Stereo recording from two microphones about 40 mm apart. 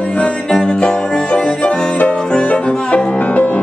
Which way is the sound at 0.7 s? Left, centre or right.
Left.